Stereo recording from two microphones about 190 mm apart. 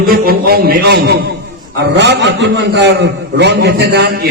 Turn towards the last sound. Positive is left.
turn(degrees=-60)  # may be behind; listen again after turning